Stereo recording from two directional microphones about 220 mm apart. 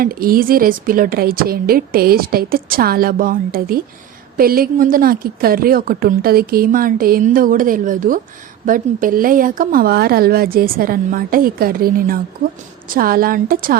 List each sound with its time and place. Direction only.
0.0 s a woman's voice: 40° right (ahead or behind)